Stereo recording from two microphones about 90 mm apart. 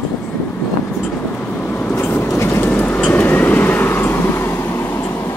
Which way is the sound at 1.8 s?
20° left (ahead or behind).